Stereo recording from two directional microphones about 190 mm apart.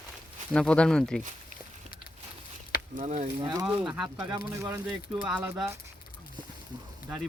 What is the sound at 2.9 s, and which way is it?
Speech, 40° right (ahead or behind).